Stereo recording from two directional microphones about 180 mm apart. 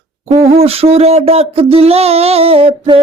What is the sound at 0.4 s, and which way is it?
Child singing, 35° right (ahead or behind).